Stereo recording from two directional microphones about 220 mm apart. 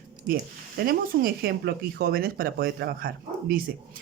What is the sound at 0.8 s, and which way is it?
Speech, 45° right (ahead or behind).